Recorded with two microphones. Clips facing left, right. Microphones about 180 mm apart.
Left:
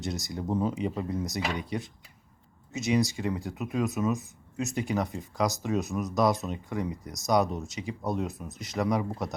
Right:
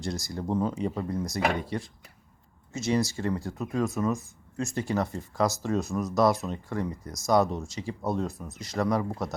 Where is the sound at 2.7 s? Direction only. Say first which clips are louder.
Even; 20° left (ahead or behind).